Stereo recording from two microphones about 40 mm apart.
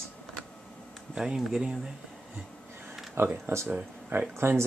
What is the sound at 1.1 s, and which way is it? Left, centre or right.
Speech, centre.